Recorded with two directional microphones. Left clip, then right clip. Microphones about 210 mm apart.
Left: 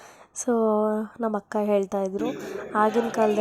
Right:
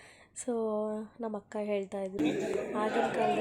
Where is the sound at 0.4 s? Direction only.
30° left (ahead or behind).